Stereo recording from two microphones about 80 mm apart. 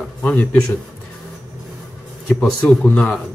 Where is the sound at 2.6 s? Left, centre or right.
Centre.